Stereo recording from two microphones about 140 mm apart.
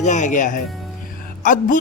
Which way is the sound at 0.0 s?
60° left (ahead or behind).